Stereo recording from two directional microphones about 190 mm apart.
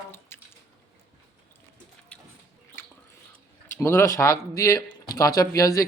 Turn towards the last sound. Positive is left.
turn(degrees=15)  # may be behind; listen again after turning